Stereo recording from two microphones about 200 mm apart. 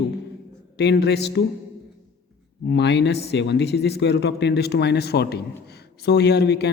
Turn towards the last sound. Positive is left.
turn(degrees=55)  # may be behind; listen again after turning